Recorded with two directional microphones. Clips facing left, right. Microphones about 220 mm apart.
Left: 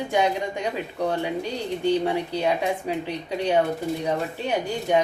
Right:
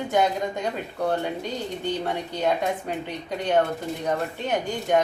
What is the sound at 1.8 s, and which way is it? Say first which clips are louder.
Speech: left 7 dB; 10° left (ahead or behind).